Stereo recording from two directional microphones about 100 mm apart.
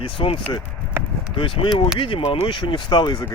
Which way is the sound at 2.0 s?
60° left (ahead or behind).